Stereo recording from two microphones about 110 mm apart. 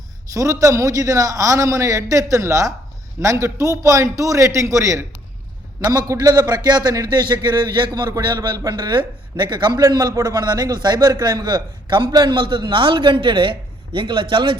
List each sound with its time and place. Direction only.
0.3 s a man's voice: 30° right (ahead or behind); by 14.6 s 50° right (ahead or behind)